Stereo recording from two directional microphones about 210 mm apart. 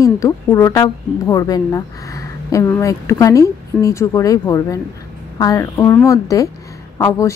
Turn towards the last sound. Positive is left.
turn(degrees=15)  # may be behind; listen again after turning